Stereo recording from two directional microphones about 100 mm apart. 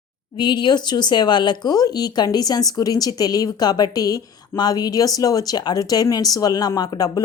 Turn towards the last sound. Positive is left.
turn(degrees=40)  # may be behind; listen again after turning